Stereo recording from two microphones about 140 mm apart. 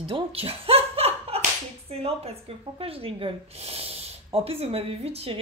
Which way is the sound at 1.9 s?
45° right (ahead or behind).